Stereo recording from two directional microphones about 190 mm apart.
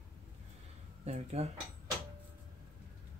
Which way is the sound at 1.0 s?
35° right (ahead or behind).